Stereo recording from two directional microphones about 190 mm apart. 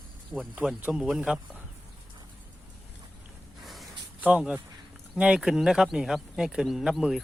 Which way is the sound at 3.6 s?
Centre (ahead or behind).